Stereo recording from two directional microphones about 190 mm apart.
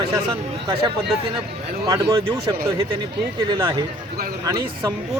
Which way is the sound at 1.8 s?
25° right (ahead or behind).